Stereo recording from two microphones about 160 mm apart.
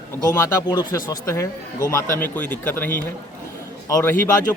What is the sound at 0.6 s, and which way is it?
A man's voice, 25° left (ahead or behind).